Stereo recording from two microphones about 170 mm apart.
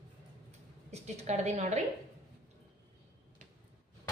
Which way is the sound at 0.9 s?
40° right (ahead or behind).